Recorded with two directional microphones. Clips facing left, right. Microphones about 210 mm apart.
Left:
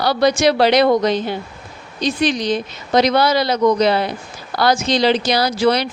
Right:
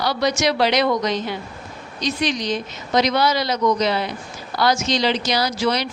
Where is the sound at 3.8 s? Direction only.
60° left (ahead or behind).